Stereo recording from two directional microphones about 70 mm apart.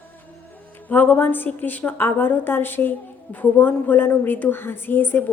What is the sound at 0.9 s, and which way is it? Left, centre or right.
A woman's voice, left.